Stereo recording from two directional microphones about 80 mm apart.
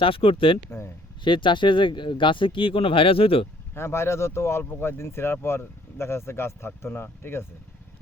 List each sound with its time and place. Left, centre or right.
0.0 s speech: left
0.7 s a sound: left
1.2 s speech: left
3.8 s speech: left